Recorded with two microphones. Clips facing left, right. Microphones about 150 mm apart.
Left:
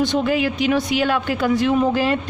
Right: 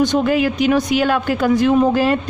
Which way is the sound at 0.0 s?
45° right (ahead or behind).